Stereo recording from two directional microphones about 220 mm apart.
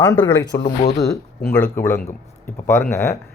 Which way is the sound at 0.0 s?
15° left (ahead or behind).